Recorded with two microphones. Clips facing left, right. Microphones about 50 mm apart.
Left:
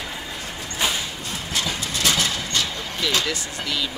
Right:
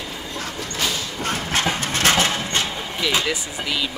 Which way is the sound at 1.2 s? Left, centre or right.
Right.